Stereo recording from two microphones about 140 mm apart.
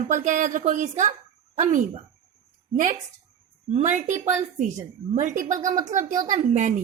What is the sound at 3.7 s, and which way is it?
A woman's voice, 60° right (ahead or behind).